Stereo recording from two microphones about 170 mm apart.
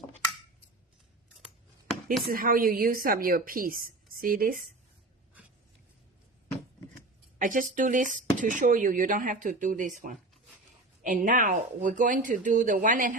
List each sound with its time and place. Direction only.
2.2 s a woman's voice: 60° right (ahead or behind)
7.3 s speech: 50° right (ahead or behind)